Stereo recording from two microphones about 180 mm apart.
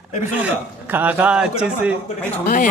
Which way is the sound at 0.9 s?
10° right (ahead or behind).